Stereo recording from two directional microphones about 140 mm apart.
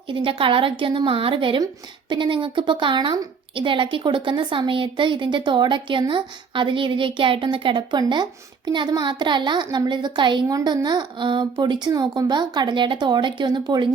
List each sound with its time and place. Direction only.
0.1 s a woman's voice: 35° right (ahead or behind)